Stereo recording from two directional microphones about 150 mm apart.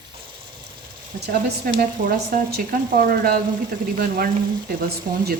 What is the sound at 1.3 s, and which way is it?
Speech, 80° right.